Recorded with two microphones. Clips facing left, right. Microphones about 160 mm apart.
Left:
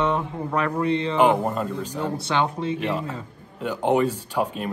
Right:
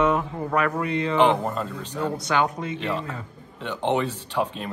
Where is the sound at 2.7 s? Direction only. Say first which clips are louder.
Left 2 dB; 10° left (ahead or behind).